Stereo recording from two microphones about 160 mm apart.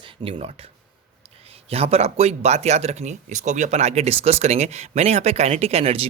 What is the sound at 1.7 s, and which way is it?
Speech, 40° right (ahead or behind).